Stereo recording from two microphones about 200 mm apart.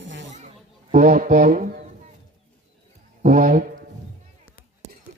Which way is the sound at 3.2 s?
40° right (ahead or behind).